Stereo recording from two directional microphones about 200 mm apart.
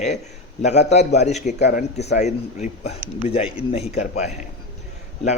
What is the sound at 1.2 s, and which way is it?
A man's voice, 35° left (ahead or behind).